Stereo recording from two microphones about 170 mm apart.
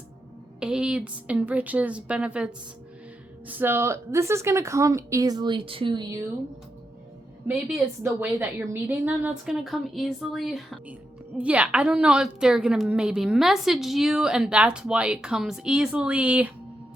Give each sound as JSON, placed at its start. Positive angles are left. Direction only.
{"t": 0.6, "sound": "speech", "side_deg": -5}
{"t": 8.0, "sound": "a woman's voice", "side_deg": -10}